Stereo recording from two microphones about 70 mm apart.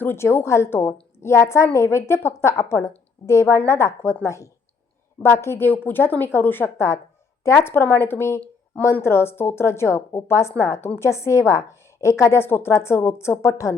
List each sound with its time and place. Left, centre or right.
0.0 s a woman's voice: left